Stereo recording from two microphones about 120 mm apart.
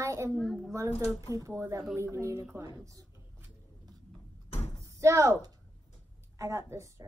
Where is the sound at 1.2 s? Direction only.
25° right (ahead or behind).